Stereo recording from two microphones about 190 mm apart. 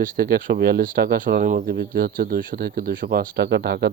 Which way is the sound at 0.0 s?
50° right (ahead or behind).